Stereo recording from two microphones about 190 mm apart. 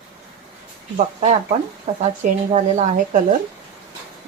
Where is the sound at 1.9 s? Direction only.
35° right (ahead or behind).